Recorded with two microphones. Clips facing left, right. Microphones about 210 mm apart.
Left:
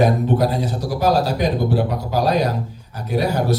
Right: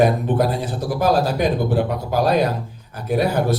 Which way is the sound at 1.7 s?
50° right (ahead or behind).